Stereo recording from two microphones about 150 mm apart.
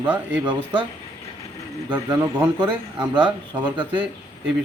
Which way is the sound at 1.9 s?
25° right (ahead or behind).